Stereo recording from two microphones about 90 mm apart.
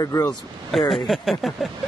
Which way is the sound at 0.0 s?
40° left (ahead or behind).